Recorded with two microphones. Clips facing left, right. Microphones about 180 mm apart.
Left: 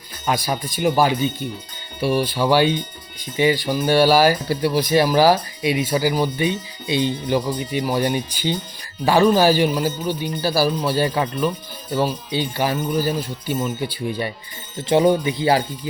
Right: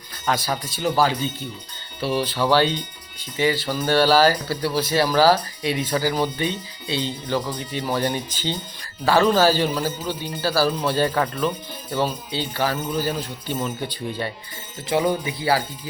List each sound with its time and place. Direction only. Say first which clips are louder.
0.3 s a man's voice: left 2 dB; 15° left (ahead or behind)
14.8 s speech: left 5 dB; 25° left (ahead or behind)